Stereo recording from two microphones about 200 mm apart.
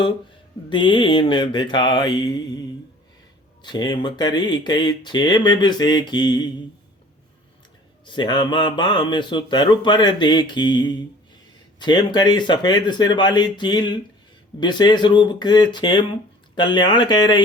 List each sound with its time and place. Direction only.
0.7 s speech: 25° left (ahead or behind)
8.0 s speech: 25° left (ahead or behind)